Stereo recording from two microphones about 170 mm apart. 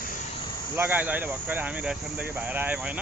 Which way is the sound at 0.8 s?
10° right (ahead or behind).